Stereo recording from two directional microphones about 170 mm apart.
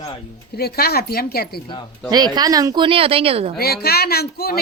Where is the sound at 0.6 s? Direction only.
65° left (ahead or behind).